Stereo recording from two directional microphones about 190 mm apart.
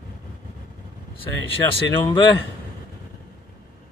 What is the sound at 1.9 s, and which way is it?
Speech, 20° left (ahead or behind).